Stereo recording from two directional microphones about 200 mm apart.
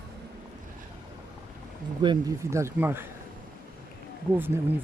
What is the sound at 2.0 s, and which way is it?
Speech, 20° right (ahead or behind).